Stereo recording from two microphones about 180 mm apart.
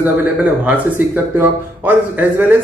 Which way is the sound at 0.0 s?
10° right (ahead or behind).